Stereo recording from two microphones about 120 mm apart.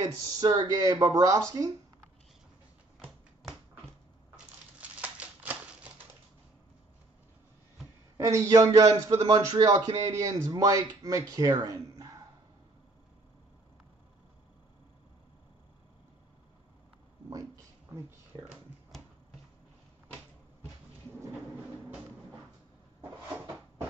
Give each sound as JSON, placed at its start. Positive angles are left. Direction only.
{"t": 0.0, "sound": "speech", "side_deg": -30}
{"t": 4.7, "sound": "a sound", "side_deg": -15}
{"t": 8.2, "sound": "speech", "side_deg": -25}